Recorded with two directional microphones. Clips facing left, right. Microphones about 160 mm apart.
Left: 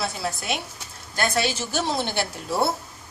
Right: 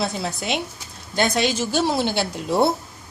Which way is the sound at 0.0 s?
20° right (ahead or behind).